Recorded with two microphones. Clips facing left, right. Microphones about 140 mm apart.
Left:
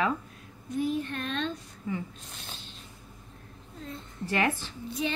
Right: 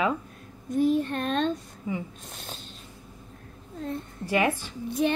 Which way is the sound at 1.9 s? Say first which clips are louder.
Right 2 dB; 15° right (ahead or behind).